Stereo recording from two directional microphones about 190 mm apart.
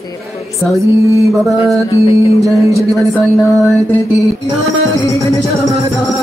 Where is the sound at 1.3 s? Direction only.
Centre (ahead or behind).